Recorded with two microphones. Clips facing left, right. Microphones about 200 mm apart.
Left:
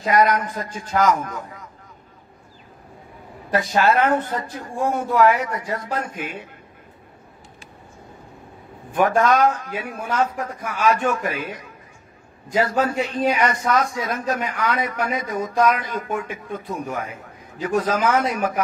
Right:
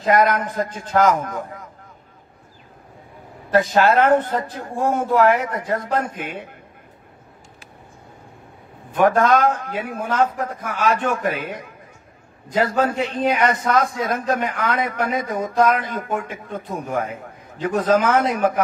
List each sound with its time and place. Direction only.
0.0 s speech: 50° right (ahead or behind)
3.5 s speech: 50° right (ahead or behind)
9.0 s speech: 55° right (ahead or behind)
13.3 s speech: 55° right (ahead or behind)